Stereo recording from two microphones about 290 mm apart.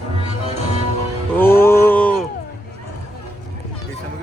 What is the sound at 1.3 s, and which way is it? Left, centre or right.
Speech, centre.